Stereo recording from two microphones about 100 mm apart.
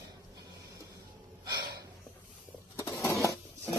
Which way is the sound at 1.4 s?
45° right (ahead or behind).